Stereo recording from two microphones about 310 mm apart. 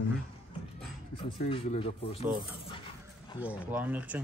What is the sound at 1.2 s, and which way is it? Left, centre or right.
Speech, centre.